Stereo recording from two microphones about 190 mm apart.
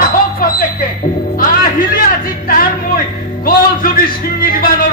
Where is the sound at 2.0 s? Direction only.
50° left (ahead or behind).